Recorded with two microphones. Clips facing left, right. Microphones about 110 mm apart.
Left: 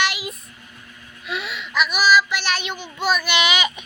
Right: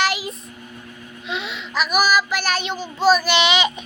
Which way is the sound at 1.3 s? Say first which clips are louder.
Even; 25° right (ahead or behind).